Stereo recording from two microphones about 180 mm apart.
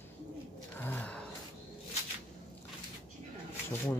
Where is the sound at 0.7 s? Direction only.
10° left (ahead or behind).